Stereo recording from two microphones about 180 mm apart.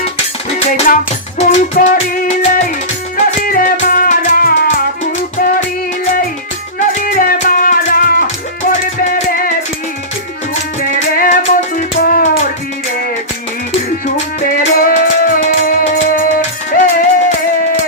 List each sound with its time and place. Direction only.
1.4 s music: 40° left (ahead or behind)
6.7 s music: 50° left (ahead or behind)
14.4 s music: 50° left (ahead or behind)